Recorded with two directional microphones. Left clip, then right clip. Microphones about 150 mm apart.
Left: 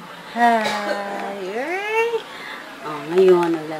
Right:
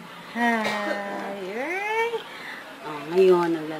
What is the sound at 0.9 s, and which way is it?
Music, 30° left (ahead or behind).